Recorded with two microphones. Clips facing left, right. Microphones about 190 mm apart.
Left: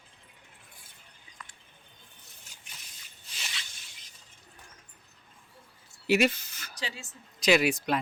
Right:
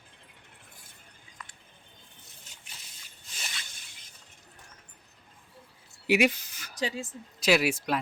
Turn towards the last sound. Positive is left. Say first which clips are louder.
# left 1 dB
turn(degrees=-5)  # may be behind; listen again after turning